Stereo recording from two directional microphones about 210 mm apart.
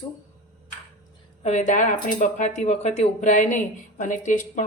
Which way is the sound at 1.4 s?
35° left (ahead or behind).